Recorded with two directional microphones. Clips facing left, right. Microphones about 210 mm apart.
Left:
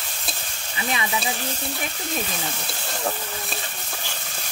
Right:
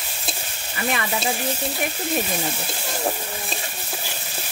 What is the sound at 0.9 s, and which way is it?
Speech, 55° right (ahead or behind).